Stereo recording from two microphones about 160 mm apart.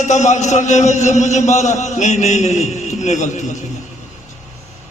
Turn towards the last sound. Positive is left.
turn(degrees=50)  # may be behind; listen again after turning